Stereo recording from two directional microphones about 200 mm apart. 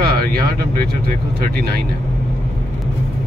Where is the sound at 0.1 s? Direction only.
50° right (ahead or behind).